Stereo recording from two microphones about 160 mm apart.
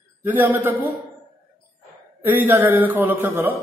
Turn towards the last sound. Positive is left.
turn(degrees=-10)  # may be behind; listen again after turning